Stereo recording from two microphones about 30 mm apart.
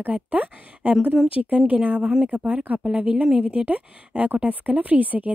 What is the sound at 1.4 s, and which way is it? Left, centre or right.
Speech, right.